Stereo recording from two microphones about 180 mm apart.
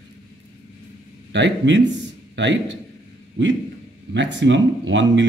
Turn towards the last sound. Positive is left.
turn(degrees=-90)